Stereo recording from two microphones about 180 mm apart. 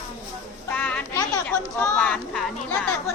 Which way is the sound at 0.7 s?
10° left (ahead or behind).